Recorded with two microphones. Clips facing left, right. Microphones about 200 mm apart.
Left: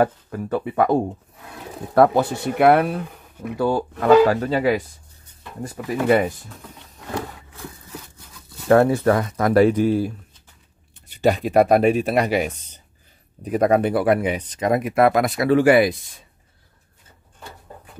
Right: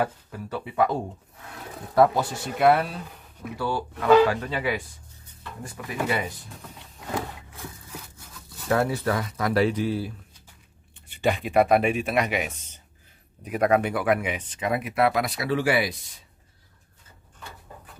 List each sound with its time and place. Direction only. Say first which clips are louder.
0.0 s speech: left 8 dB; 50° left (ahead or behind)
3.5 s speech: left 8 dB; 45° left (ahead or behind)
8.6 s speech: left 9 dB; 50° left (ahead or behind)